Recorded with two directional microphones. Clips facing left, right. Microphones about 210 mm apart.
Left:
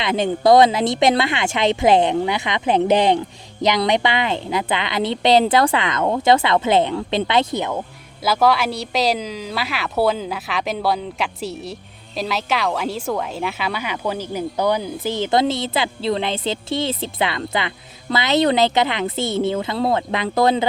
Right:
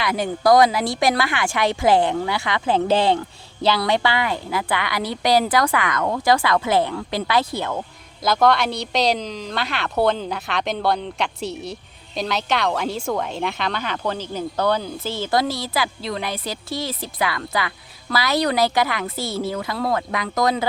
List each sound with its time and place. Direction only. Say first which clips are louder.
0.0 s speech: left 3 dB; 25° left (ahead or behind)
8.2 s a woman's voice: even; 5° left (ahead or behind); by 20.7 s 30° left (ahead or behind)